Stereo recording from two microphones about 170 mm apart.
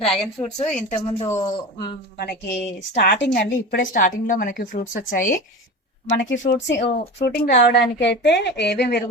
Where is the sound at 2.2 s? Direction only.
70° left (ahead or behind); by 5.4 s 50° left (ahead or behind).